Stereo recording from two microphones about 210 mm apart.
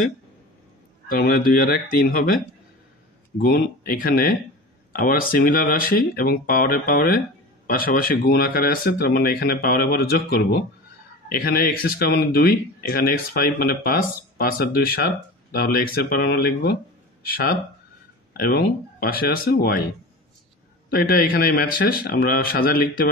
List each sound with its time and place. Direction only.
1.0 s speech: 45° left (ahead or behind)
3.3 s speech: 45° left (ahead or behind)
18.4 s speech: 45° left (ahead or behind)
20.9 s speech: 45° left (ahead or behind)